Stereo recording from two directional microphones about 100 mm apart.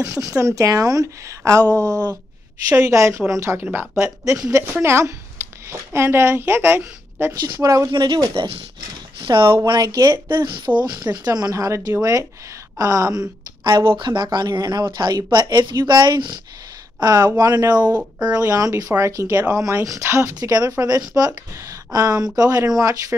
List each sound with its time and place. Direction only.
0.4 s speech: 30° right (ahead or behind)
2.7 s a woman's voice: 30° right (ahead or behind)
8.0 s speech: 45° right (ahead or behind)
9.2 s speech: 55° right (ahead or behind)
9.7 s speech: 40° right (ahead or behind)
10.3 s speech: 45° right (ahead or behind)
13.7 s speech: 50° right (ahead or behind)